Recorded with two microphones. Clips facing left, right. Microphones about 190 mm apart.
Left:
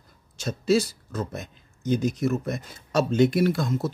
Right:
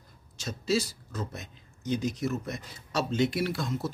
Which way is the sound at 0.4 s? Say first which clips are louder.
Left 6 dB; 55° left (ahead or behind).